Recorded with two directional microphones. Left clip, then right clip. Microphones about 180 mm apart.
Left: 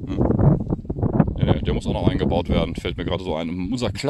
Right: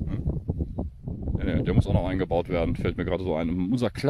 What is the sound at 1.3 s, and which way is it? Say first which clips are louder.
Speech: left 4 dB; 5° right (ahead or behind).